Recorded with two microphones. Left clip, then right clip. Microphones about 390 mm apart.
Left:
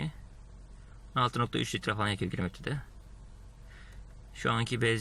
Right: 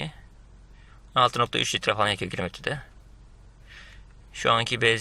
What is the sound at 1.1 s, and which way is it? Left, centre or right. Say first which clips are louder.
Speech: right 8 dB; centre.